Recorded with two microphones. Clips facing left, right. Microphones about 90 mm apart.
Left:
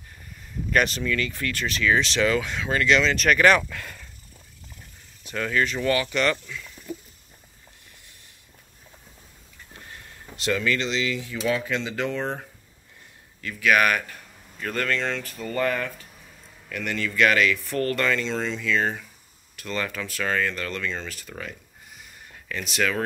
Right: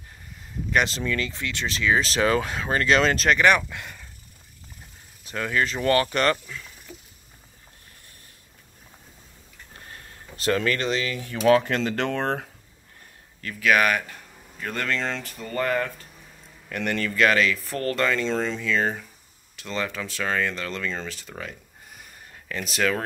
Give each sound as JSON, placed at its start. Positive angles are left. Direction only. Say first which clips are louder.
{"t": 0.8, "sound": "speech", "louder": "left 1 dB", "side_deg": -30}
{"t": 3.3, "sound": "speech", "louder": "left 1 dB", "side_deg": -15}
{"t": 5.3, "sound": "speech", "louder": "even", "side_deg": -25}
{"t": 5.9, "sound": "speech", "louder": "right 5 dB", "side_deg": -40}
{"t": 9.8, "sound": "a sound", "louder": "even", "side_deg": -40}
{"t": 11.4, "sound": "speech", "louder": "right 7 dB", "side_deg": -65}
{"t": 13.4, "sound": "speech", "louder": "even", "side_deg": -30}
{"t": 15.4, "sound": "speech", "louder": "even", "side_deg": -20}
{"t": 16.7, "sound": "speech", "louder": "right 2 dB", "side_deg": -45}
{"t": 17.1, "sound": "speech", "louder": "left 1 dB", "side_deg": -30}
{"t": 18.7, "sound": "speech", "louder": "even", "side_deg": -30}
{"t": 22.5, "sound": "speech", "louder": "right 1 dB", "side_deg": -35}